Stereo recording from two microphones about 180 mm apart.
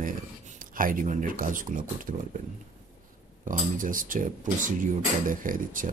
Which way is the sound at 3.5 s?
50° right (ahead or behind).